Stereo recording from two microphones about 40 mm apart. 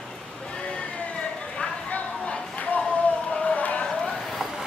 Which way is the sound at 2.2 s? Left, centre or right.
Left.